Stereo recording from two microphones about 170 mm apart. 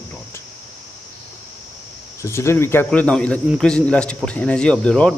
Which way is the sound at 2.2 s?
15° left (ahead or behind).